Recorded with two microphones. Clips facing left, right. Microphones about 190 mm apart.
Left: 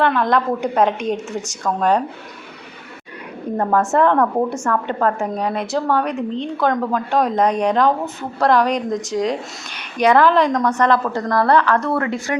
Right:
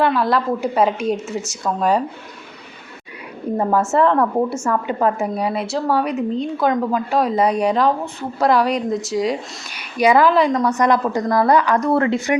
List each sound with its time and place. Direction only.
0.0 s a woman's voice: 5° right (ahead or behind)
3.6 s a woman's voice: 5° right (ahead or behind)
11.9 s a woman's voice: 25° right (ahead or behind)